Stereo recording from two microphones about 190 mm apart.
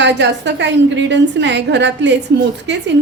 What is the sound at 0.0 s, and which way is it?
A woman's voice, 65° right (ahead or behind).